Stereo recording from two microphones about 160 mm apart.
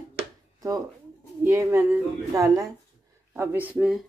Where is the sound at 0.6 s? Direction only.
20° right (ahead or behind).